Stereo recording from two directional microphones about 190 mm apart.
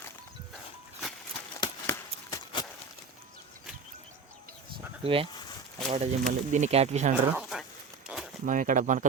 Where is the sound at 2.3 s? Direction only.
20° left (ahead or behind).